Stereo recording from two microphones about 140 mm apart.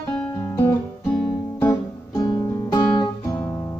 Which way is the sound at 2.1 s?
30° left (ahead or behind).